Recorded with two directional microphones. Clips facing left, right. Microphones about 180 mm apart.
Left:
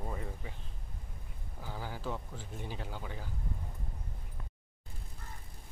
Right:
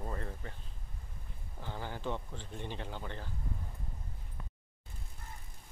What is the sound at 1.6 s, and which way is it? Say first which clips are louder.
Speech: right 1 dB; 5° left (ahead or behind).